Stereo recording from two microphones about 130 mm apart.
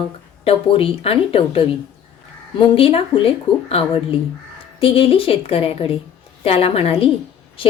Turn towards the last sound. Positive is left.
turn(degrees=50)  # may be behind; listen again after turning